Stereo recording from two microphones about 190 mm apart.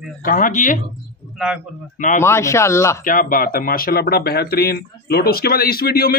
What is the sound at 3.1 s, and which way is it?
Speech, 45° left (ahead or behind).